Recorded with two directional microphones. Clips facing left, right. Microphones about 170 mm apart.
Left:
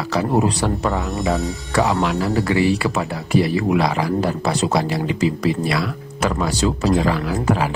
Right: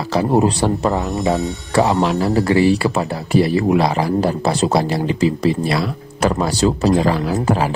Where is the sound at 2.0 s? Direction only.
35° right (ahead or behind).